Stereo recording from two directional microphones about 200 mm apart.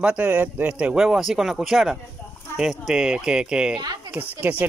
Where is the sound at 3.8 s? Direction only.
20° right (ahead or behind).